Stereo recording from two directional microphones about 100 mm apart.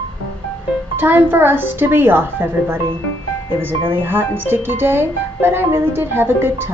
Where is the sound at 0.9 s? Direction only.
20° right (ahead or behind).